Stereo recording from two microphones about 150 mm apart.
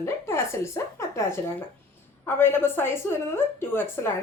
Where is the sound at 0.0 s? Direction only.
20° left (ahead or behind).